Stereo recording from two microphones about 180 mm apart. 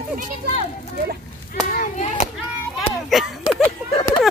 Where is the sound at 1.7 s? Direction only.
45° left (ahead or behind).